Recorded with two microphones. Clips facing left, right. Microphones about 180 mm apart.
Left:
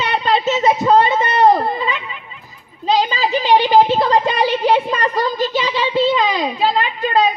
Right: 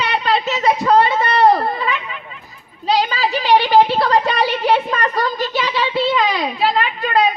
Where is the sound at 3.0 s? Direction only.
20° left (ahead or behind).